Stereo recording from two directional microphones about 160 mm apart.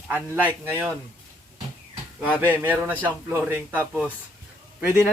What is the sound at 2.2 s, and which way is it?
Speech, 10° right (ahead or behind).